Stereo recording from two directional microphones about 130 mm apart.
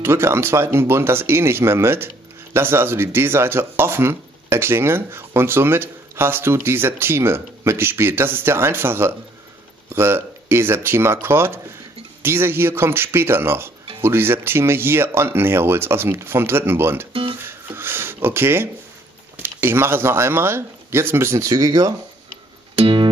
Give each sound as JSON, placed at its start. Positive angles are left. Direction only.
{"t": 0.0, "sound": "speech", "side_deg": -20}
{"t": 17.4, "sound": "a sound", "side_deg": -20}
{"t": 19.3, "sound": "speech", "side_deg": -20}
{"t": 22.8, "sound": "music", "side_deg": -45}